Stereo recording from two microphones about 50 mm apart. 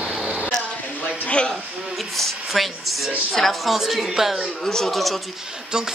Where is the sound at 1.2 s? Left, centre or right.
Left.